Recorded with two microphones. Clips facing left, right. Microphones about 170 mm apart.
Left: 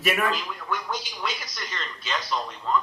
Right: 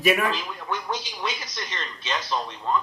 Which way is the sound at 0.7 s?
25° right (ahead or behind).